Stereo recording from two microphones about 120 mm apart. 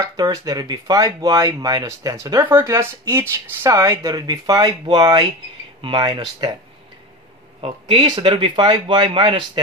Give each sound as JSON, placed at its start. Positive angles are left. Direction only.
{"t": 0.0, "sound": "speech", "side_deg": -30}
{"t": 7.9, "sound": "speech", "side_deg": -45}